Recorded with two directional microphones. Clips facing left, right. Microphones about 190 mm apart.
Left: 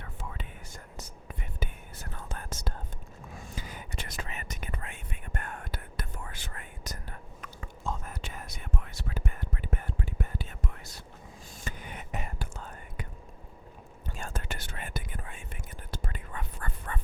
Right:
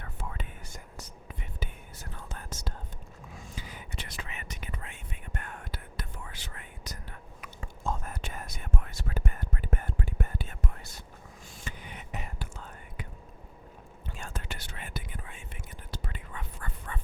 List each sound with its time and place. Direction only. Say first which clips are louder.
0.0 s whispering: right 1 dB; 50° right (ahead or behind)
1.4 s whispering: left 3 dB; 50° left (ahead or behind)
7.9 s whispering: right 2 dB; 50° right (ahead or behind)
11.5 s whispering: left 2 dB; 45° left (ahead or behind)
14.1 s whispering: left 3 dB; 45° left (ahead or behind)